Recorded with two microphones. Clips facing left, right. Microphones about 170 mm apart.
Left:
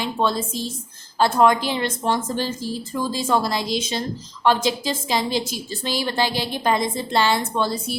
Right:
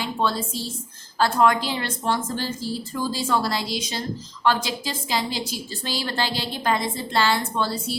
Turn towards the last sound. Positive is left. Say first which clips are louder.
# left 2 dB
turn(degrees=20)  # may be behind; listen again after turning